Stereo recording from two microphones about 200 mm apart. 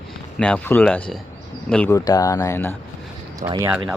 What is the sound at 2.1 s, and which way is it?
Speech, 15° left (ahead or behind).